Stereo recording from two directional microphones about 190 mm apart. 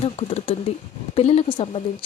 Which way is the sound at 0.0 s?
35° left (ahead or behind).